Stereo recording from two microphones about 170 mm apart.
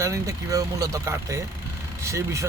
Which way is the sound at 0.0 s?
20° right (ahead or behind).